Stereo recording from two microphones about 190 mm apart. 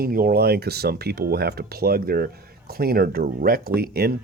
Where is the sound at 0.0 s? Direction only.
50° right (ahead or behind).